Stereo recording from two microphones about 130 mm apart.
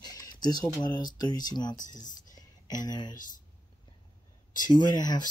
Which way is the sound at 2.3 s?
30° left (ahead or behind).